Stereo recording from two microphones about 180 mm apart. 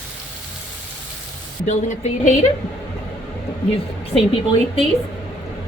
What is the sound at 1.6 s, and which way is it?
Speech, 40° left (ahead or behind).